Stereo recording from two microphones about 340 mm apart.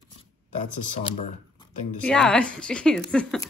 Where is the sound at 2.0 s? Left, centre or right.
Centre.